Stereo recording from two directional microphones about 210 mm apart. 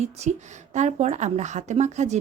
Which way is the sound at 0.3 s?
35° right (ahead or behind).